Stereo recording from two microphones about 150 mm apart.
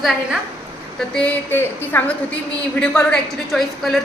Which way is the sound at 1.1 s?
10° left (ahead or behind).